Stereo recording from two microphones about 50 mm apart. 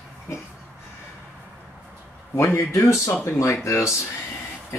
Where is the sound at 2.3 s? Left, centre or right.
Left.